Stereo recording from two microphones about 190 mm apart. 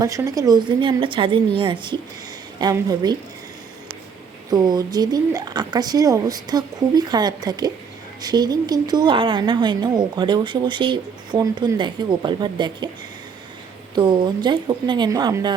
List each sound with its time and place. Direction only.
0.0 s a woman's voice: 15° right (ahead or behind)
4.5 s a woman's voice: 20° right (ahead or behind)
13.9 s a woman's voice: 25° right (ahead or behind)